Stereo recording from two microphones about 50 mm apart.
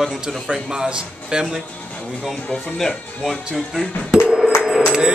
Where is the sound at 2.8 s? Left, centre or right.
Centre.